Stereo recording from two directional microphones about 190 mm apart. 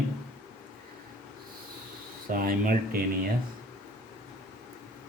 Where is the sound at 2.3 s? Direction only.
50° right (ahead or behind).